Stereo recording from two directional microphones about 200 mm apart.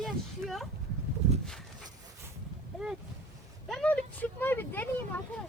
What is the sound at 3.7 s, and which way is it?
Speech, 5° left (ahead or behind).